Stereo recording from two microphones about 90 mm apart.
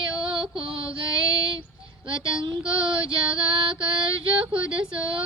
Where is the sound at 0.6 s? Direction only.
75° right (ahead or behind).